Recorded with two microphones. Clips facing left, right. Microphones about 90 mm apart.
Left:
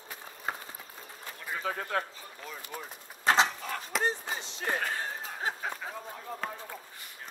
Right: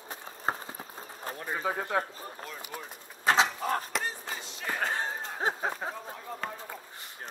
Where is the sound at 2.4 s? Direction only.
Centre (ahead or behind).